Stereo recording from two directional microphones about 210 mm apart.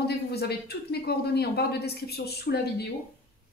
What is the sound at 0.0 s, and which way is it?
Speech, 50° left (ahead or behind).